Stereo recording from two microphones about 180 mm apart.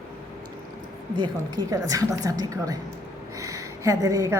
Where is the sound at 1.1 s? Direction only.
25° right (ahead or behind).